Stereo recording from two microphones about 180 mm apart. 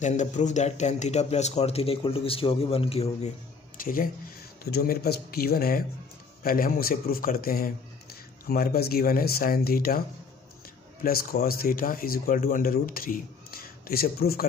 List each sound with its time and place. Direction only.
0.0 s speech: 40° left (ahead or behind)
3.7 s a man's voice: 50° left (ahead or behind)